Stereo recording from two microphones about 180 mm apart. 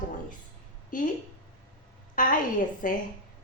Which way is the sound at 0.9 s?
45° left (ahead or behind).